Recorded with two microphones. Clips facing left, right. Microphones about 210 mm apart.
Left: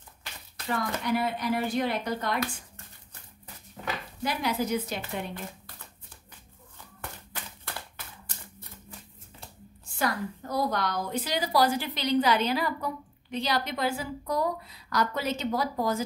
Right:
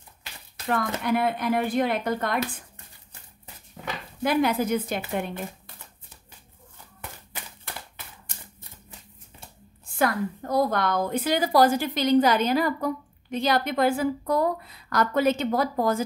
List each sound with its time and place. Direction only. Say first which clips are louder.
0.7 s speech: right 4 dB; 55° right (ahead or behind)
4.2 s a woman's voice: right 7 dB; 55° right (ahead or behind)
9.9 s a woman's voice: right 5 dB; 55° right (ahead or behind)